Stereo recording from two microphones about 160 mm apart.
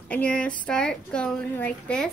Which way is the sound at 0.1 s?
10° left (ahead or behind).